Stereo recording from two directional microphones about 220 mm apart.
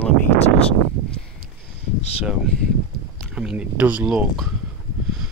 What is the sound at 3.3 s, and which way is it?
Speech, 5° right (ahead or behind).